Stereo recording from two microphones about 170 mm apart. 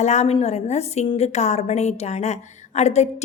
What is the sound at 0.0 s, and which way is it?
A woman's voice, 40° left (ahead or behind).